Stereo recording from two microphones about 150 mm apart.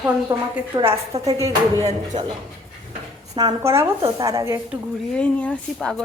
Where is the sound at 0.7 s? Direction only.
35° right (ahead or behind).